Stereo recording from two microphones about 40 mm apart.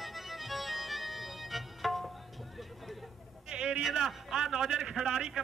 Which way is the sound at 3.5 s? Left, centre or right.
Right.